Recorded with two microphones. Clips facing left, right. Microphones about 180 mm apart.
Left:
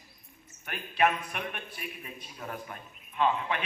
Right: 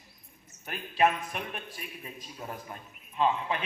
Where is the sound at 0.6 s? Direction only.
35° right (ahead or behind).